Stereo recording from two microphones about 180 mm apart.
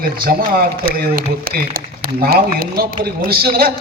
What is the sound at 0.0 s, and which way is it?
Speech, 55° right (ahead or behind).